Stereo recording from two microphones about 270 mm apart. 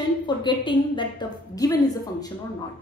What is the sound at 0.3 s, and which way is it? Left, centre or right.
A woman's voice, centre.